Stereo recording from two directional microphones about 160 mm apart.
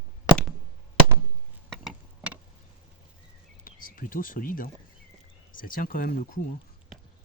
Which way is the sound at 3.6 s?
60° left (ahead or behind).